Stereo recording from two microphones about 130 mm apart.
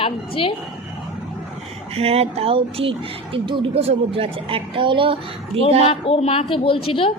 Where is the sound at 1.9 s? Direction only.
50° right (ahead or behind).